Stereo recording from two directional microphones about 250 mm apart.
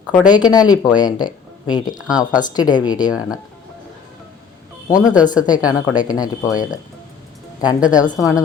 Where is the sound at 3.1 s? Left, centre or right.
Centre.